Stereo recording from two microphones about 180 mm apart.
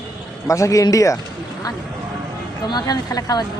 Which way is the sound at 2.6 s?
20° left (ahead or behind).